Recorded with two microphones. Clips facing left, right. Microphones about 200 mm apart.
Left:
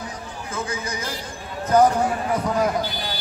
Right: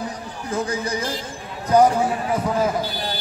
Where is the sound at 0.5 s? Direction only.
35° right (ahead or behind).